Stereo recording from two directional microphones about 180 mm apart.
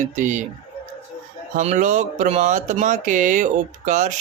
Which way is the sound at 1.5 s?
40° right (ahead or behind).